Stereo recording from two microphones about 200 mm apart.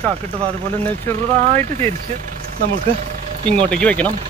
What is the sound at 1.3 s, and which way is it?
Speech, 35° right (ahead or behind).